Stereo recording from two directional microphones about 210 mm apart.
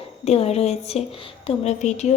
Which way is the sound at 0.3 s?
30° left (ahead or behind).